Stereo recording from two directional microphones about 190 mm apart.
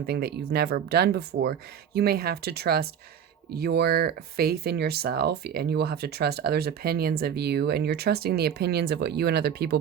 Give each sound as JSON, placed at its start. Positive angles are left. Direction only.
{"t": 0.0, "sound": "speech", "side_deg": -55}